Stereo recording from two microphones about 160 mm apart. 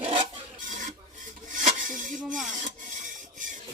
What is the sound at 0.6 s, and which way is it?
Filing, 50° right (ahead or behind).